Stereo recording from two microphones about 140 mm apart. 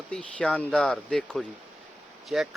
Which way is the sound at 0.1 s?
5° left (ahead or behind).